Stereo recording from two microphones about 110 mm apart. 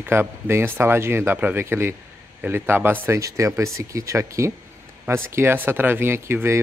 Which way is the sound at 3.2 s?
30° right (ahead or behind).